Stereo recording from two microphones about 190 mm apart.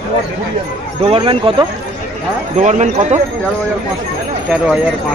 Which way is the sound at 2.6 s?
40° right (ahead or behind).